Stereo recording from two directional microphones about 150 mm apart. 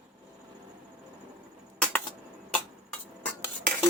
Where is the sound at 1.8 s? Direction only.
10° left (ahead or behind).